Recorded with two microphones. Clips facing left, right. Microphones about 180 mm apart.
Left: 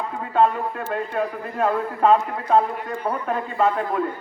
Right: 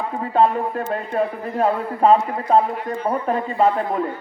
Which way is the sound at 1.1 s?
35° right (ahead or behind).